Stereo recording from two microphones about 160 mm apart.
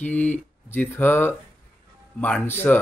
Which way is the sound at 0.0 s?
10° left (ahead or behind).